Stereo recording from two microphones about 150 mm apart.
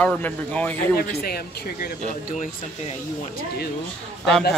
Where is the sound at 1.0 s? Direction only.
90° left.